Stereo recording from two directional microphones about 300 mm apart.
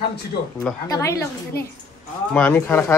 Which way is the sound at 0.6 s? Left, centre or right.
Centre.